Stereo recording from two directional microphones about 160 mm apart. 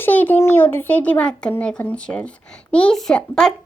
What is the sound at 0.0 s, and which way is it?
A child's voice, 10° left (ahead or behind).